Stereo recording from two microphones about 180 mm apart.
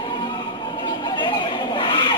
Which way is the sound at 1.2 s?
25° left (ahead or behind).